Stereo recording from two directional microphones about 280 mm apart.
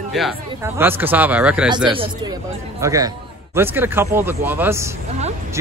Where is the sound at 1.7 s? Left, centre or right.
Centre.